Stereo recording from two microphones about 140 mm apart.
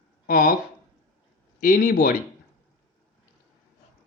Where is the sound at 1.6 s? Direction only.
85° left.